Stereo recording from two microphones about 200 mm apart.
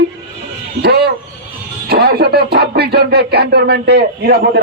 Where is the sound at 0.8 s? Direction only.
55° right (ahead or behind).